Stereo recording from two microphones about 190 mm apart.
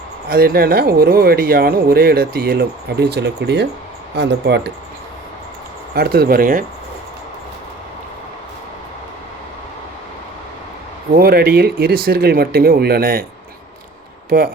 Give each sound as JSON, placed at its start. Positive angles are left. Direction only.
{"t": 0.3, "sound": "speech", "side_deg": -55}
{"t": 5.9, "sound": "speech", "side_deg": -55}
{"t": 11.1, "sound": "speech", "side_deg": -55}
{"t": 14.3, "sound": "speech", "side_deg": -50}